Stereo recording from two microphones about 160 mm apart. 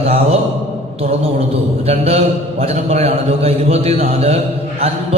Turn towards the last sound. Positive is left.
turn(degrees=-40)  # may be behind; listen again after turning